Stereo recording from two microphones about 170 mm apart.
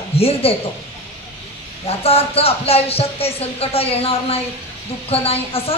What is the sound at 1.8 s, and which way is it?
Speech, 35° left (ahead or behind).